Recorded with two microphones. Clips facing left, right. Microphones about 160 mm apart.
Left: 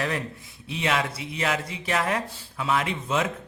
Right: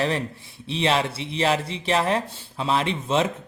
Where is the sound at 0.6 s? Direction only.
30° right (ahead or behind).